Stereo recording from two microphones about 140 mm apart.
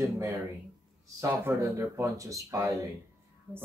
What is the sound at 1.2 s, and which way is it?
Speech, 20° right (ahead or behind).